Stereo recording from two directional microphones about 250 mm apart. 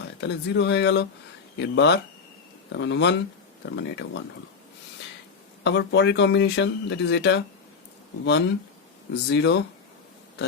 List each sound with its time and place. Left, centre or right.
0.2 s speech: left
5.6 s speech: left